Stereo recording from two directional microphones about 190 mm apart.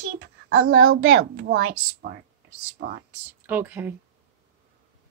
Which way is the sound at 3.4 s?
10° right (ahead or behind).